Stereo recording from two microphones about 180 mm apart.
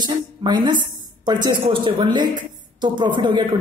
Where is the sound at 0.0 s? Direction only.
25° right (ahead or behind).